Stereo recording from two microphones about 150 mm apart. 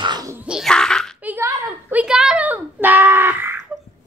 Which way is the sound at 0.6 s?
5° left (ahead or behind).